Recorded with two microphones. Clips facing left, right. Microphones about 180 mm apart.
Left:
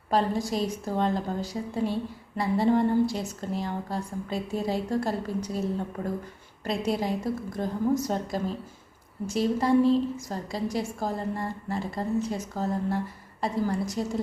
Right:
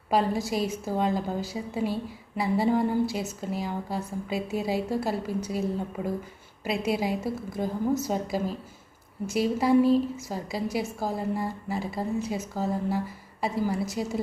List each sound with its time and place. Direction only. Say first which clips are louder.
0.1 s a woman's voice: even; 5° right (ahead or behind)